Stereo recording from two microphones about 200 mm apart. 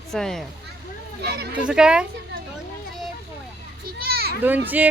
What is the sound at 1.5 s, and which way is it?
Speech, 5° right (ahead or behind).